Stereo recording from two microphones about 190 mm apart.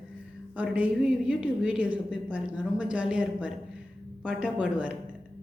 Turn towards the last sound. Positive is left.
turn(degrees=-5)  # may be behind; listen again after turning